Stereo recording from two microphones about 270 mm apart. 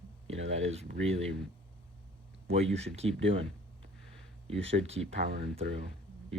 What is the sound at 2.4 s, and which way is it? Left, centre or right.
Speech, right.